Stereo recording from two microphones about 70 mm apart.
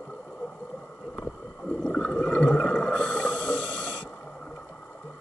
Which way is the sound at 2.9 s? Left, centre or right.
Centre.